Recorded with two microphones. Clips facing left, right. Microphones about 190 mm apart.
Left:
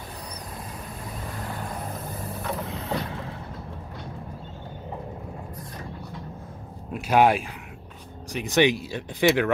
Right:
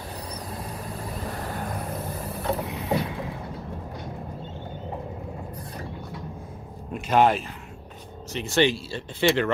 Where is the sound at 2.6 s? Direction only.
15° right (ahead or behind).